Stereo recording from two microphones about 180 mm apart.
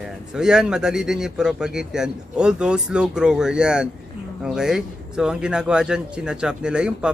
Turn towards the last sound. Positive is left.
turn(degrees=-5)  # may be behind; listen again after turning